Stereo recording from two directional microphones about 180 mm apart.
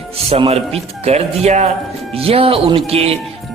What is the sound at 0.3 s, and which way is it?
A man's voice, 35° right (ahead or behind).